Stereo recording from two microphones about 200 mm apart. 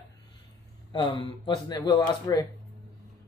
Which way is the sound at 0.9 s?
25° left (ahead or behind).